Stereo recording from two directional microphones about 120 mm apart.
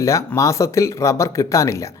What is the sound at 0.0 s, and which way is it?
Speech, 25° left (ahead or behind).